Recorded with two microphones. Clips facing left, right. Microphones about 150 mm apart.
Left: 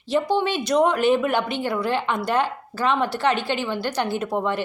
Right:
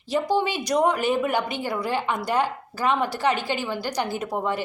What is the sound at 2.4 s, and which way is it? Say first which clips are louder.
Speech: left 1 dB; 15° right (ahead or behind).